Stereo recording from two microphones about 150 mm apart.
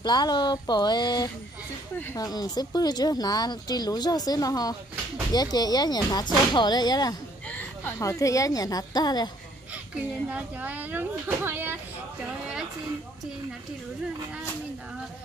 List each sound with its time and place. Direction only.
0.0 s speech: 30° left (ahead or behind)
7.4 s a sound: 10° left (ahead or behind)
8.0 s speech: 20° left (ahead or behind)
10.3 s speech: 10° right (ahead or behind)